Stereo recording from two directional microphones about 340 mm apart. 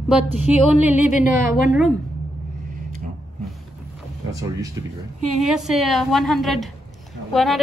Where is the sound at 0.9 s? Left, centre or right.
Left.